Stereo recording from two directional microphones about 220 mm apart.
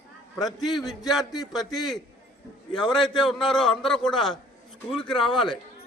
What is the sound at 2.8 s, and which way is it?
A man's voice, centre (ahead or behind).